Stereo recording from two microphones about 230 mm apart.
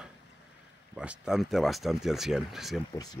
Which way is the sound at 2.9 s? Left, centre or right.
Centre.